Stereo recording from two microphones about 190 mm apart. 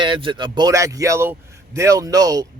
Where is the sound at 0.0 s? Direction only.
25° right (ahead or behind).